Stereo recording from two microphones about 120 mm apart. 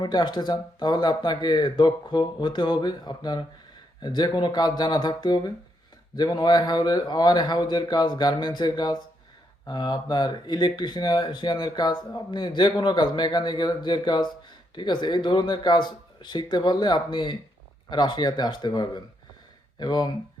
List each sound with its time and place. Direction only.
0.0 s speech: 35° left (ahead or behind)